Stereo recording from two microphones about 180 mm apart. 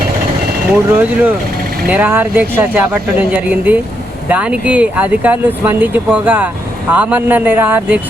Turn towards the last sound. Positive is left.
turn(degrees=-10)  # may be behind; listen again after turning